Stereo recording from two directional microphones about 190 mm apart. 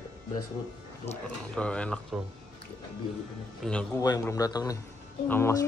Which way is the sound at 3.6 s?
Centre (ahead or behind).